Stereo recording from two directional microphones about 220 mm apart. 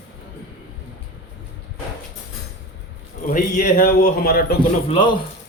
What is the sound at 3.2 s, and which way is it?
A man's voice, 40° left (ahead or behind).